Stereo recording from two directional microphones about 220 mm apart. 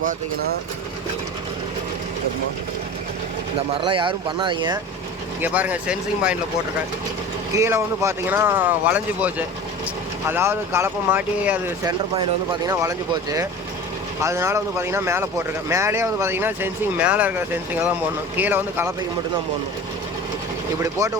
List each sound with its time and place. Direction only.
3.8 s speech: 25° right (ahead or behind)
5.4 s speech: 5° right (ahead or behind)
7.5 s speech: 15° right (ahead or behind)
18.3 s speech: 10° right (ahead or behind)
21.0 s speech: 15° right (ahead or behind)